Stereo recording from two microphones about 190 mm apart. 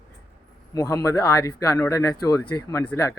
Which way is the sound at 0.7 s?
20° left (ahead or behind).